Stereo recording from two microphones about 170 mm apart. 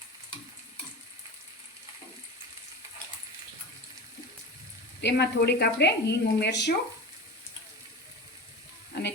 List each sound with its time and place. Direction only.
4.9 s speech: 85° left